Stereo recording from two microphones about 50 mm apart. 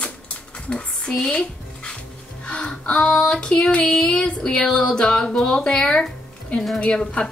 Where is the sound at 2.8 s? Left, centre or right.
Left.